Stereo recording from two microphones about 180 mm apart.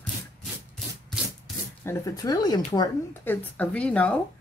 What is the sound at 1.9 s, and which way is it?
Speech, 20° left (ahead or behind).